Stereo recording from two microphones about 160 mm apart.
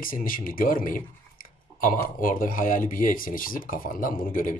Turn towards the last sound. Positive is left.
turn(degrees=55)  # may be behind; listen again after turning